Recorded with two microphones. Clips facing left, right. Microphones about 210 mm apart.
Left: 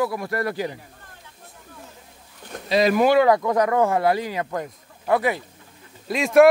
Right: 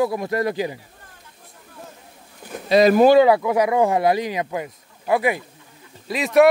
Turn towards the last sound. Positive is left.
turn(degrees=0)  # may be behind; listen again after turning